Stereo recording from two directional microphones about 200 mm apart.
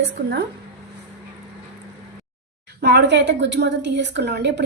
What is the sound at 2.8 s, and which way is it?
A woman's voice, 60° right (ahead or behind).